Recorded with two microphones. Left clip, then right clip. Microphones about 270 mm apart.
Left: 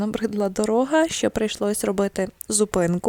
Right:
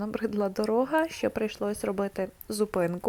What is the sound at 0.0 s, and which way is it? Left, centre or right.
Speech, left.